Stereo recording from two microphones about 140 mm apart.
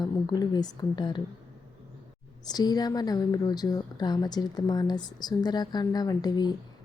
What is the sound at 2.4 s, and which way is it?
A woman's voice, 30° left (ahead or behind).